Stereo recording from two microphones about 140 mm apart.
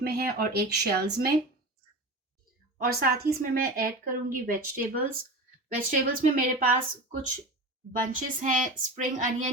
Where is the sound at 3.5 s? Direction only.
90° right.